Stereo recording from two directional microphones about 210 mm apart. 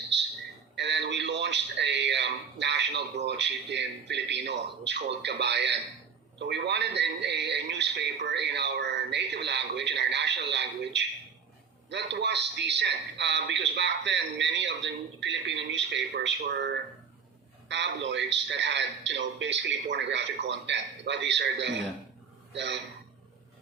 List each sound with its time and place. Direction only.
0.8 s a man's voice: 55° right (ahead or behind)